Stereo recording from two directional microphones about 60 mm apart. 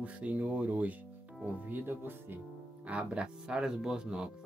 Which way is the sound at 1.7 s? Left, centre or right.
Right.